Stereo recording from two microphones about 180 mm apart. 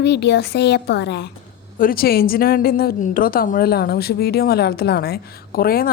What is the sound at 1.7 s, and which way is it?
A woman's voice, 50° left (ahead or behind).